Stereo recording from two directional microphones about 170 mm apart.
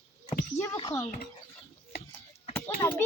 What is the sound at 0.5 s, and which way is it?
Speech, 15° left (ahead or behind).